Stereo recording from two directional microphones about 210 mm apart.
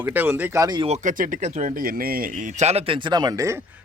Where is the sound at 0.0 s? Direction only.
10° right (ahead or behind).